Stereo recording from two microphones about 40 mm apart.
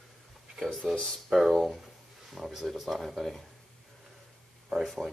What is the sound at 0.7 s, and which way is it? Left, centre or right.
Speech, centre.